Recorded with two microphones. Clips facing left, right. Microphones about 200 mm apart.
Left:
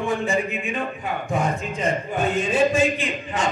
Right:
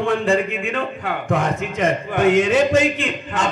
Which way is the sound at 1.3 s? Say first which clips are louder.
Right 3 dB; 90° right.